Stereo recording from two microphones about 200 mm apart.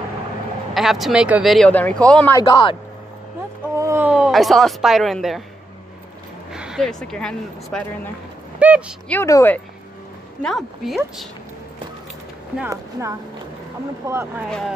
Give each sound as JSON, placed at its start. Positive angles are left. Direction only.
{"t": 0.7, "sound": "speech", "side_deg": 0}
{"t": 2.3, "sound": "a man's voice", "side_deg": 20}
{"t": 3.7, "sound": "speech", "side_deg": -15}
{"t": 6.5, "sound": "speech", "side_deg": -5}
{"t": 8.5, "sound": "speech", "side_deg": -5}
{"t": 9.1, "sound": "speech", "side_deg": 15}
{"t": 10.4, "sound": "speech", "side_deg": 0}
{"t": 14.0, "sound": "speech", "side_deg": -10}